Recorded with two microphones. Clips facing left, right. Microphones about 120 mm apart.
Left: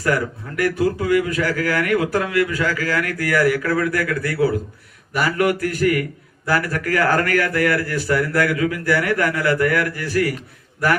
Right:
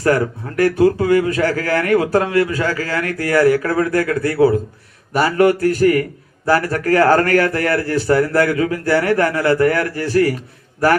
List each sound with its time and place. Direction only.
0.0 s a man's voice: 30° right (ahead or behind)